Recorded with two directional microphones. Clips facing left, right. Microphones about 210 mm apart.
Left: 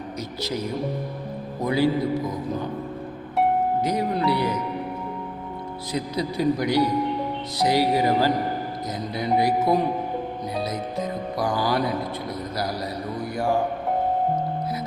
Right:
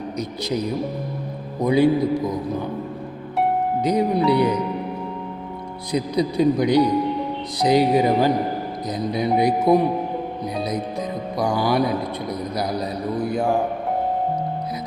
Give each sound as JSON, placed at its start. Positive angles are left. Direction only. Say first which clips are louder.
{"t": 0.2, "sound": "speech", "louder": "right 4 dB", "side_deg": -15}
{"t": 1.6, "sound": "music", "louder": "right 5 dB", "side_deg": -20}
{"t": 3.8, "sound": "speech", "louder": "right 5 dB", "side_deg": -15}
{"t": 5.9, "sound": "speech", "louder": "right 6 dB", "side_deg": -20}
{"t": 7.6, "sound": "music", "louder": "right 4 dB", "side_deg": -20}
{"t": 9.0, "sound": "speech", "louder": "right 3 dB", "side_deg": -15}
{"t": 11.4, "sound": "speech", "louder": "right 4 dB", "side_deg": -15}
{"t": 12.3, "sound": "music", "louder": "right 6 dB", "side_deg": -20}